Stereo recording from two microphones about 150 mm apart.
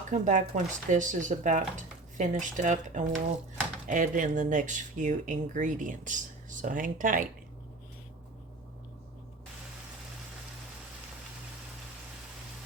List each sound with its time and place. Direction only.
0.1 s speech: 55° right (ahead or behind)